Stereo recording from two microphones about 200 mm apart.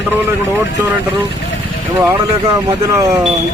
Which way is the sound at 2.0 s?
15° right (ahead or behind).